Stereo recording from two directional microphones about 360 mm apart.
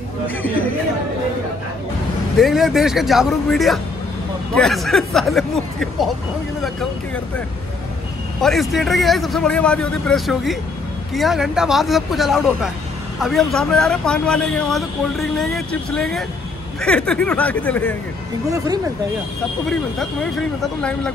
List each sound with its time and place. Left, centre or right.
2.3 s speech: centre
8.4 s speech: centre